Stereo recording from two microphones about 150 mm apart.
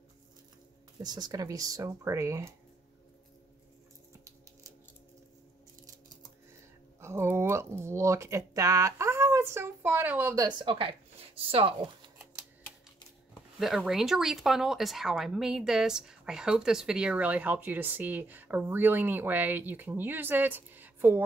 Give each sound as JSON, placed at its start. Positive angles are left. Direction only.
{"t": 1.0, "sound": "speech", "side_deg": -25}
{"t": 7.0, "sound": "speech", "side_deg": -15}
{"t": 10.3, "sound": "speech", "side_deg": -25}
{"t": 10.7, "sound": "speech", "side_deg": -40}
{"t": 13.6, "sound": "speech", "side_deg": 0}